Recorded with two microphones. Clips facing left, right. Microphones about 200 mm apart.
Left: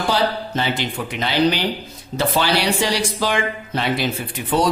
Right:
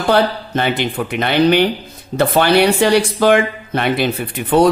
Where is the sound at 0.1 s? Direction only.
60° right (ahead or behind).